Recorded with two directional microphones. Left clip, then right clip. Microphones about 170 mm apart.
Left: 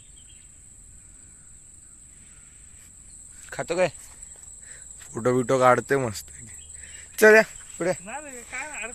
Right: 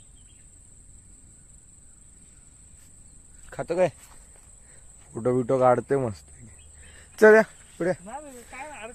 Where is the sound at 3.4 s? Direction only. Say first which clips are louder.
Left 1 dB; 15° right (ahead or behind).